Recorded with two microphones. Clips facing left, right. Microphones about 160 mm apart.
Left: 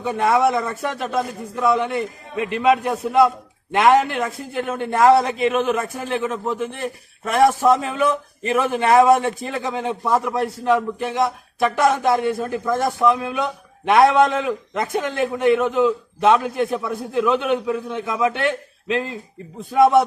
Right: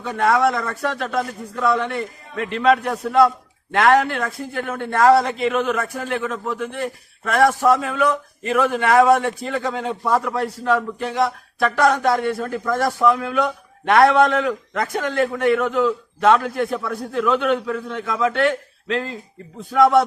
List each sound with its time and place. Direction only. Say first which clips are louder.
0.0 s a man's voice: even; 15° left (ahead or behind)